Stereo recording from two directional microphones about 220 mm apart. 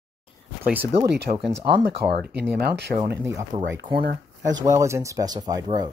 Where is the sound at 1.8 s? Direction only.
45° right (ahead or behind).